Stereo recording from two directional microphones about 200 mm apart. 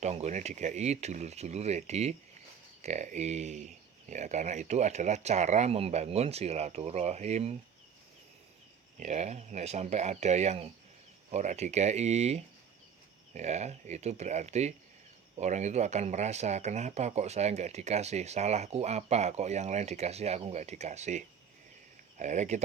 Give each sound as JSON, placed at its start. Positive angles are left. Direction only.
{"t": 0.0, "sound": "speech", "side_deg": -35}
{"t": 9.0, "sound": "speech", "side_deg": -35}